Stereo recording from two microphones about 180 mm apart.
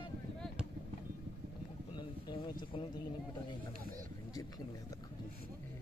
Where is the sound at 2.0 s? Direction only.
25° left (ahead or behind).